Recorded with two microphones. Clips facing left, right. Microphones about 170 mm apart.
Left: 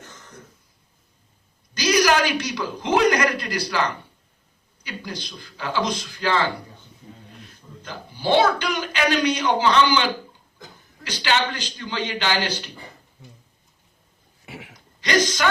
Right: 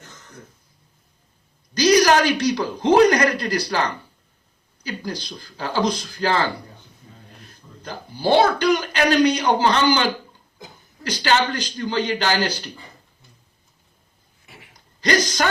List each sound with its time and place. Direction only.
1.8 s a man's voice: 35° right (ahead or behind)
7.8 s speech: 40° right (ahead or behind)
14.4 s a sound: 75° left (ahead or behind)
15.0 s speech: 40° right (ahead or behind)